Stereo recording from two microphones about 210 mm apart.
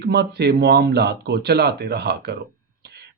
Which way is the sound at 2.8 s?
50° right (ahead or behind).